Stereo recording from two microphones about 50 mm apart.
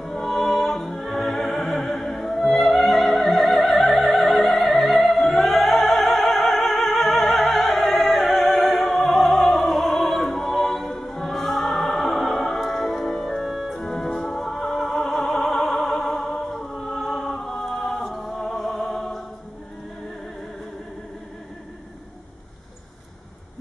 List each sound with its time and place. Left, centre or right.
0.0 s music: centre
1.6 s opera: centre
3.7 s opera: left
4.0 s opera: centre
10.3 s music: centre